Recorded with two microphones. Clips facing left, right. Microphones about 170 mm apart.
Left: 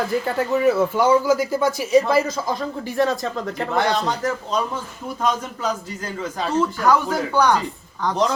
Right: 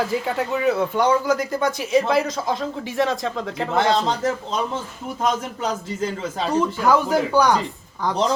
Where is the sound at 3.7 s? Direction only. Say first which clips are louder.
Right 2 dB; 25° right (ahead or behind).